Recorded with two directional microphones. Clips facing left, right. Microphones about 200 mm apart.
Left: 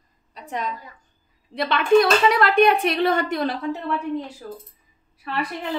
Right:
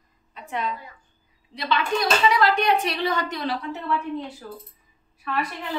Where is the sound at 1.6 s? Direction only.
55° left (ahead or behind).